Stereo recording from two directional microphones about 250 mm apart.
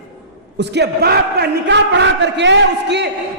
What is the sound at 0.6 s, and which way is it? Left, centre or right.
A man's voice, right.